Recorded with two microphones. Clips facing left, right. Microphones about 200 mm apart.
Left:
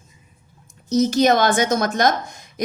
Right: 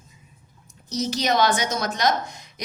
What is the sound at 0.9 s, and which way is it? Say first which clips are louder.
A woman's voice: left 7 dB; 50° left (ahead or behind).